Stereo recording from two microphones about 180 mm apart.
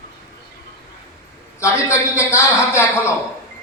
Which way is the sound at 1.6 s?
15° left (ahead or behind).